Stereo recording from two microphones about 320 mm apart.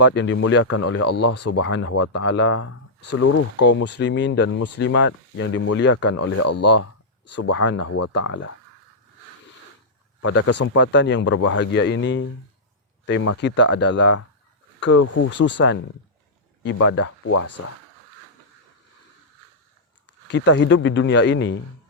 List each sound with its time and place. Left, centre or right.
0.0 s speech: left
4.9 s speech: left
7.5 s speech: left
7.8 s speech: left
10.2 s speech: left
10.8 s speech: left
14.8 s speech: left
16.8 s speech: left
17.3 s speech: left
20.3 s speech: left